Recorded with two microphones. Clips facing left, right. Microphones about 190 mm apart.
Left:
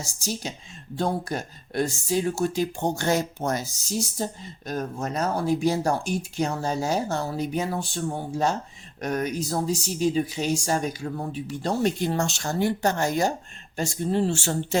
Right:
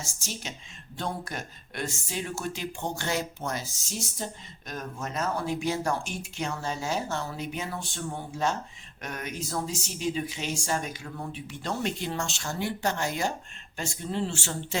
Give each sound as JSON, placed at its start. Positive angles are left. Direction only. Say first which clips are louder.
{"t": 0.0, "sound": "speech", "louder": "left 7 dB", "side_deg": 35}
{"t": 9.0, "sound": "speech", "louder": "left 9 dB", "side_deg": 35}